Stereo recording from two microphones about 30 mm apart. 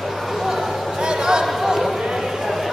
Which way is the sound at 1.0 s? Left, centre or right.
Right.